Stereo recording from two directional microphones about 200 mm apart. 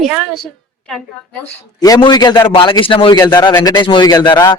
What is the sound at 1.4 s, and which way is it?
A man's voice, 15° left (ahead or behind).